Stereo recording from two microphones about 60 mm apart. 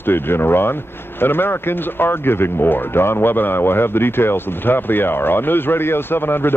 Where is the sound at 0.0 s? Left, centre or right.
Left.